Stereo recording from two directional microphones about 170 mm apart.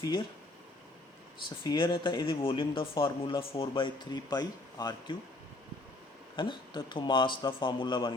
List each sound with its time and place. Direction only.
1.4 s speech: 25° left (ahead or behind)
6.3 s speech: 30° left (ahead or behind)